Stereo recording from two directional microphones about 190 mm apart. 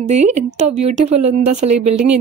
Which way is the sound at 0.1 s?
35° right (ahead or behind).